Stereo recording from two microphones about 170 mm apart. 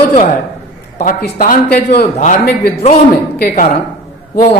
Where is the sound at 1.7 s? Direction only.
70° left (ahead or behind).